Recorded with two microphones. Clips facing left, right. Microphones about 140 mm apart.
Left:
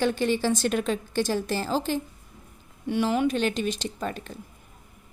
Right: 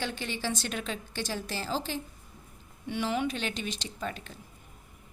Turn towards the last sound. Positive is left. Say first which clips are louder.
# left 5 dB
turn(degrees=45)  # may be behind; listen again after turning